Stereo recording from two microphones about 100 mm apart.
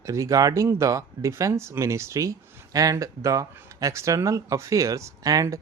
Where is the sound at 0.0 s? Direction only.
30° right (ahead or behind).